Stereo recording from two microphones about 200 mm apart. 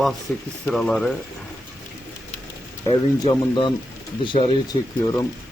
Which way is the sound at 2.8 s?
25° left (ahead or behind).